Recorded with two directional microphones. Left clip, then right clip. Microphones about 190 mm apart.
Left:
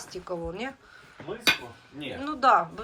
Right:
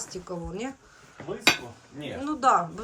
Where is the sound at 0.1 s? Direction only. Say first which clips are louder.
Left 7 dB; 10° right (ahead or behind).